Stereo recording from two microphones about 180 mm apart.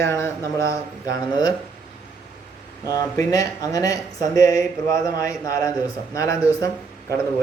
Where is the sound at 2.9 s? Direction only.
20° left (ahead or behind).